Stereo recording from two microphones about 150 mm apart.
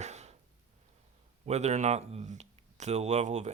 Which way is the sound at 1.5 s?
50° right (ahead or behind).